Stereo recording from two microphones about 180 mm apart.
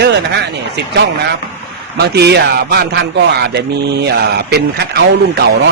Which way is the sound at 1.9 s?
65° right (ahead or behind).